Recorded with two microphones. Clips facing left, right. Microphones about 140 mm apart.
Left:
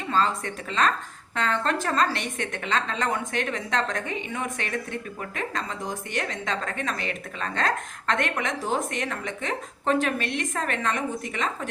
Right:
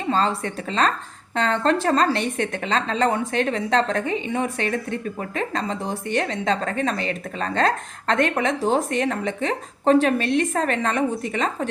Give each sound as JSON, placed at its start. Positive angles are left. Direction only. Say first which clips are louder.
{"t": 0.1, "sound": "a woman's voice", "louder": "right 3 dB", "side_deg": -30}